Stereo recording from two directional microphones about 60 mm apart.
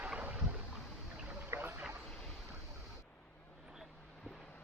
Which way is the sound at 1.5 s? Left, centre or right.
Right.